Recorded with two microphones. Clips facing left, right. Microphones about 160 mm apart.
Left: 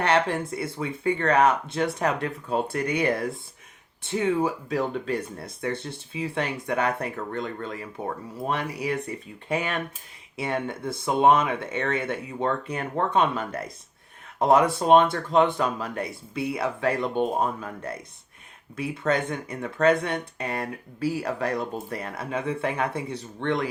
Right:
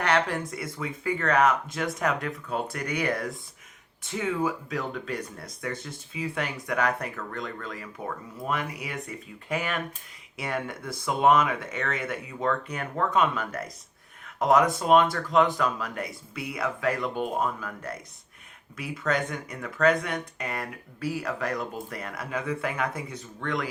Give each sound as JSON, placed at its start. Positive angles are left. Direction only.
{"t": 0.0, "sound": "speech", "side_deg": 30}